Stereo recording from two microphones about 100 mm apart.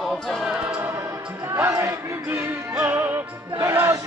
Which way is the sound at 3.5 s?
30° right (ahead or behind).